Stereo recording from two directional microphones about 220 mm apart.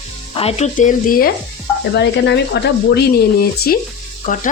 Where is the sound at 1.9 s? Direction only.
55° left (ahead or behind).